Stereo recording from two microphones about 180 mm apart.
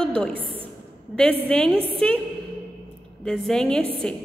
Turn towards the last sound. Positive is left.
turn(degrees=5)  # may be behind; listen again after turning